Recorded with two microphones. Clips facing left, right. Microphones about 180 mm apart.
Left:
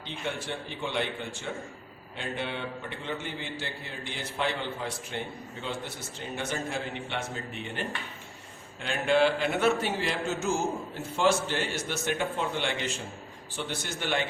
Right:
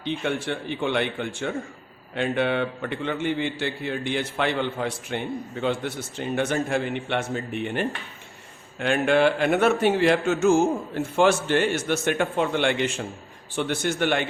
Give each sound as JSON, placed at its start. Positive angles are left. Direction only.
{"t": 0.0, "sound": "a man's voice", "side_deg": -65}